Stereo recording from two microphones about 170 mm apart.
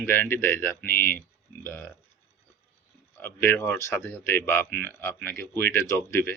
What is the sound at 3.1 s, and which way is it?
Speech, 15° left (ahead or behind).